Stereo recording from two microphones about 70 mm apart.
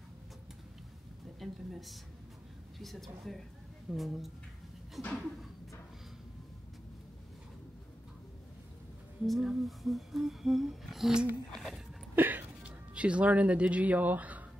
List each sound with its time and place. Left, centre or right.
1.4 s speech: centre
9.2 s speech: centre
11.5 s a sound: centre
12.2 s music: right